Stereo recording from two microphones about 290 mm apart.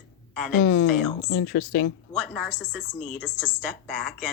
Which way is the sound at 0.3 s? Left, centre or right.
Centre.